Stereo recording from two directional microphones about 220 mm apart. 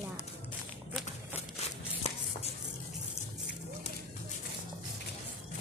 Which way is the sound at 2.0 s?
30° left (ahead or behind).